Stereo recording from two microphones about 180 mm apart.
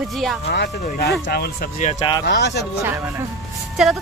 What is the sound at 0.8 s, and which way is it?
Speech, 60° left (ahead or behind).